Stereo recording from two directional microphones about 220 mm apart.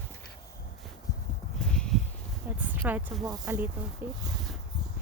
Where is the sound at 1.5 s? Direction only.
5° left (ahead or behind).